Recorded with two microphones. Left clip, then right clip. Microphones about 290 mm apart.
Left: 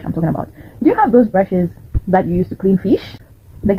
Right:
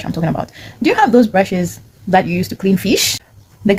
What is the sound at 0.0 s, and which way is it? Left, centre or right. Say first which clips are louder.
Speech: right 1 dB; right.